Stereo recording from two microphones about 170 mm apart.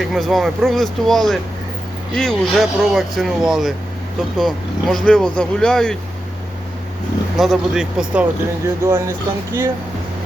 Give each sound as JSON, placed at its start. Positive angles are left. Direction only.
{"t": 0.0, "sound": "speech", "side_deg": 0}
{"t": 7.3, "sound": "speech", "side_deg": 0}
{"t": 8.8, "sound": "speech", "side_deg": -15}